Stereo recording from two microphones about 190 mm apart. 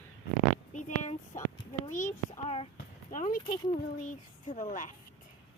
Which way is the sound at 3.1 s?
45° left (ahead or behind).